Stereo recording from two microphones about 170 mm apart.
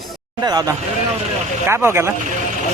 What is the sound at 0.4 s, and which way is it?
A man's voice, 25° right (ahead or behind).